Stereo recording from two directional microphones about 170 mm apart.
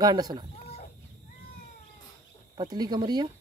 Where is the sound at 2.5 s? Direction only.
25° right (ahead or behind).